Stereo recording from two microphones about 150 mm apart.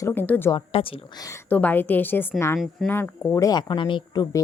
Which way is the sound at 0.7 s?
40° left (ahead or behind).